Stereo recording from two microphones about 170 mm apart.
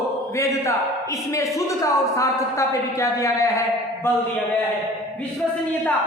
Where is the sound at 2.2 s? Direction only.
20° left (ahead or behind).